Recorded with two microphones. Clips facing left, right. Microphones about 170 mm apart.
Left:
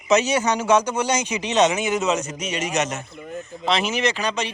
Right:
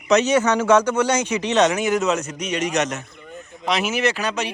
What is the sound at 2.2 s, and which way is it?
A man's voice, centre (ahead or behind).